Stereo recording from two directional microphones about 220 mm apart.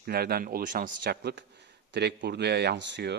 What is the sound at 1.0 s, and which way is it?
Speech, 55° right (ahead or behind).